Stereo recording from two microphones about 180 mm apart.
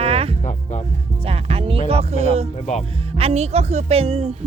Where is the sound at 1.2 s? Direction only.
35° right (ahead or behind).